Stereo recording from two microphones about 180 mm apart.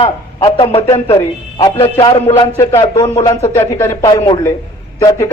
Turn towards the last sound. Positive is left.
turn(degrees=15)  # may be behind; listen again after turning